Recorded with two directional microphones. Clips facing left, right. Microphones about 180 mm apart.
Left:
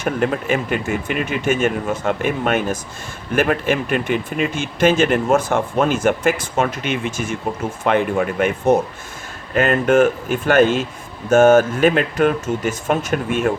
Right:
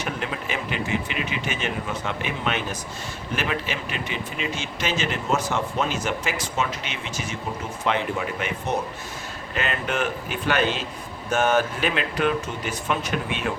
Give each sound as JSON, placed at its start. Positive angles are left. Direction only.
{"t": 0.0, "sound": "speech", "side_deg": 50}